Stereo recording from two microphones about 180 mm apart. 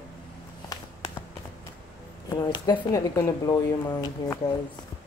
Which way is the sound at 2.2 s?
25° left (ahead or behind).